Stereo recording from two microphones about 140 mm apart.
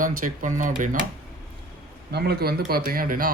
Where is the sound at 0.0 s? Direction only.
70° right (ahead or behind).